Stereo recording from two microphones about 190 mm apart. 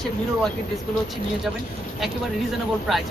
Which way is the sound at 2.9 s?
Centre (ahead or behind).